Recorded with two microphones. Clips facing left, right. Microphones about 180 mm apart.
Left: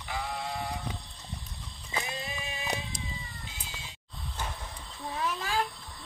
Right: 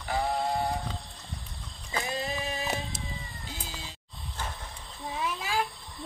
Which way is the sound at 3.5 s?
35° right (ahead or behind).